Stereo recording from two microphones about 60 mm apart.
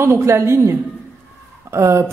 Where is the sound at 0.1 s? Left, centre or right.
Right.